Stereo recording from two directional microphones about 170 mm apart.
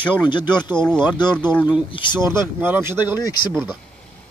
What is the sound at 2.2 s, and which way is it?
Speech, 15° right (ahead or behind).